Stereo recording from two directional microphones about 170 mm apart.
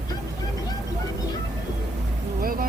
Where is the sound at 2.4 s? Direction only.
55° right (ahead or behind).